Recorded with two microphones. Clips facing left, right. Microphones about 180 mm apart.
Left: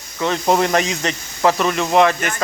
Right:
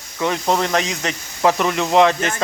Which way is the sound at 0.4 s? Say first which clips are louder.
Left 4 dB; 10° left (ahead or behind).